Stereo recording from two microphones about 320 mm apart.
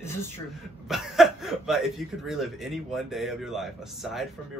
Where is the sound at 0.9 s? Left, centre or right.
Centre.